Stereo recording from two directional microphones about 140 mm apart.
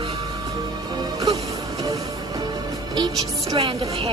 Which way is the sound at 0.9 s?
25° right (ahead or behind).